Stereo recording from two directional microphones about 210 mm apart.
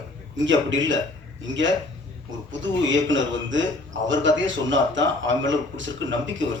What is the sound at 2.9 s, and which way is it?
A man's voice, 60° right (ahead or behind).